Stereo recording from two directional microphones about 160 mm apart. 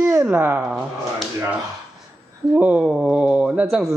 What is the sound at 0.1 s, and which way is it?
Speech, 15° right (ahead or behind).